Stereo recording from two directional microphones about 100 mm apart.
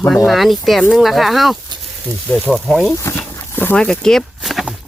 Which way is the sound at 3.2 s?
20° left (ahead or behind).